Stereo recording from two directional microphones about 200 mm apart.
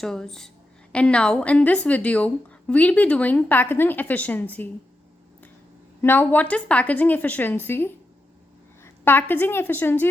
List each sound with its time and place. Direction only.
0.0 s a woman's voice: 5° left (ahead or behind)
6.0 s a woman's voice: 10° left (ahead or behind)